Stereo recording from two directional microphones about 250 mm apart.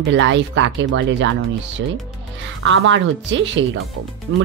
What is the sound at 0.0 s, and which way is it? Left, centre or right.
Speech, right.